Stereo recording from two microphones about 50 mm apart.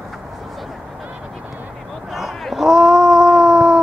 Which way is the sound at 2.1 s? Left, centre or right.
Centre.